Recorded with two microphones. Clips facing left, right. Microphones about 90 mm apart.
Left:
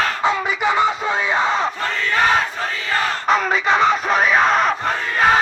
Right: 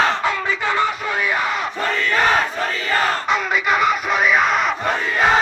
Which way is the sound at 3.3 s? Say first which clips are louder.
Left 2 dB; 35° left (ahead or behind).